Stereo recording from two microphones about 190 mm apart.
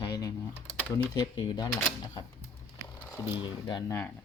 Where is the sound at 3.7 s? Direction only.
20° left (ahead or behind).